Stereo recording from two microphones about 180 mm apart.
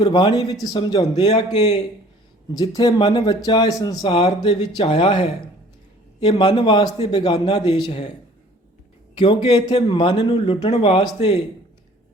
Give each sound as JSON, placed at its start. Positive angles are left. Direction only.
{"t": 0.0, "sound": "speech", "side_deg": 25}
{"t": 2.5, "sound": "speech", "side_deg": 25}
{"t": 9.1, "sound": "speech", "side_deg": 25}